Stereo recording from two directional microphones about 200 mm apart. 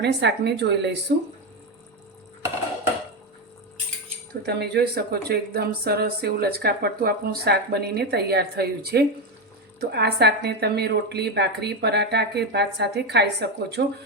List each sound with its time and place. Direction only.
0.0 s a woman's voice: 60° right (ahead or behind)
4.4 s a woman's voice: 55° right (ahead or behind)